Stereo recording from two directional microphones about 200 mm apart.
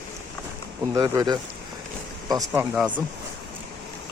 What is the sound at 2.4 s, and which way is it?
Speech, 5° right (ahead or behind).